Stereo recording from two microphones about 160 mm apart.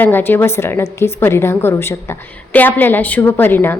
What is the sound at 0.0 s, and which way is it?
A woman's voice, 15° left (ahead or behind).